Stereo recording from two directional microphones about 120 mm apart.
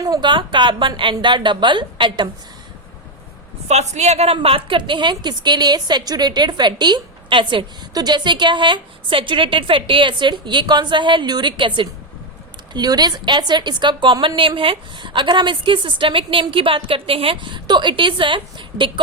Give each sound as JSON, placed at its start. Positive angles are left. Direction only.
{"t": 0.0, "sound": "a woman's voice", "side_deg": -35}
{"t": 3.7, "sound": "a woman's voice", "side_deg": -70}